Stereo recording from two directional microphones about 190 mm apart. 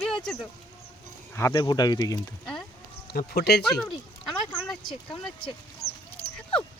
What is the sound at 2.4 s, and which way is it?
Speech, 5° left (ahead or behind).